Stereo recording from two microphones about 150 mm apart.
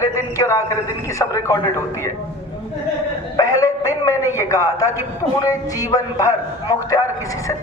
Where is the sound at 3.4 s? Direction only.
20° left (ahead or behind).